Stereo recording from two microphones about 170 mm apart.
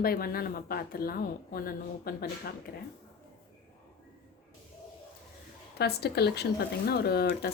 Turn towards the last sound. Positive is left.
turn(degrees=65)  # may be behind; listen again after turning